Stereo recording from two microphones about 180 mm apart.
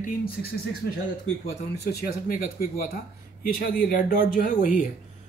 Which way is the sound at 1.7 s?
60° left (ahead or behind).